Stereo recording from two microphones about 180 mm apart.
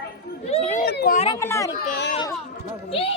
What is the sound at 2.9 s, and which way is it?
Speech, 30° left (ahead or behind).